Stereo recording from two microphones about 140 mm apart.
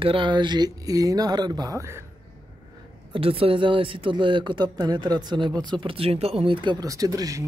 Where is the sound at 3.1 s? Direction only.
40° right (ahead or behind).